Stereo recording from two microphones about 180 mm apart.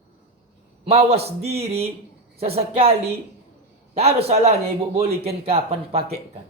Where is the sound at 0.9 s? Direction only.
35° right (ahead or behind).